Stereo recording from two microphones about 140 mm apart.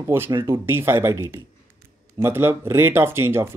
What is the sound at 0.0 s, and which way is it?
Speech, 15° right (ahead or behind).